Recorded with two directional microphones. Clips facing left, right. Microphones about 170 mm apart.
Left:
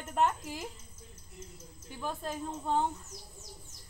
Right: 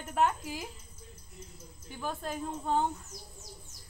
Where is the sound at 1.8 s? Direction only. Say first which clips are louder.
Right 1 dB; centre (ahead or behind).